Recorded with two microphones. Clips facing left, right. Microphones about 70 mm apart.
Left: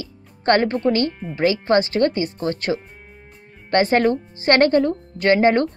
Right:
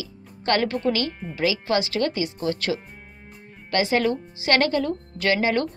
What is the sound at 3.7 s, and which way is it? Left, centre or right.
Speech, left.